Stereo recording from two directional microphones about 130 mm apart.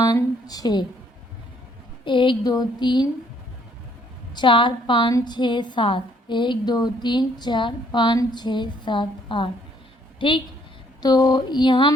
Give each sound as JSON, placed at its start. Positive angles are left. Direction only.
{"t": 0.0, "sound": "a sound", "side_deg": 30}
{"t": 2.0, "sound": "a woman's voice", "side_deg": 40}
{"t": 4.4, "sound": "a woman's voice", "side_deg": 40}